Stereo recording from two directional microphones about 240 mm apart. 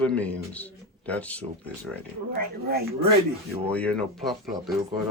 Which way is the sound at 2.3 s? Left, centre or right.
Right.